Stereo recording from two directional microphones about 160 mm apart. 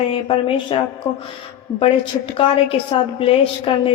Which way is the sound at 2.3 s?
35° left (ahead or behind).